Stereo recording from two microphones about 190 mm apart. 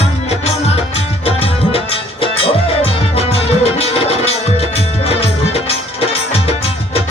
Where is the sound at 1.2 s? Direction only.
30° left (ahead or behind).